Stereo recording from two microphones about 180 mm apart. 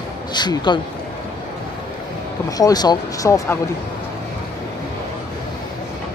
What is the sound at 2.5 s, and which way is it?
Speech, 20° left (ahead or behind).